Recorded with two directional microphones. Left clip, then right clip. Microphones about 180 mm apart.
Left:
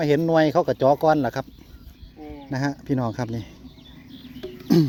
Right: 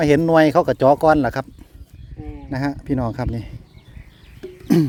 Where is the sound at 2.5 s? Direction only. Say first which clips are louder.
Right 2 dB; 20° right (ahead or behind).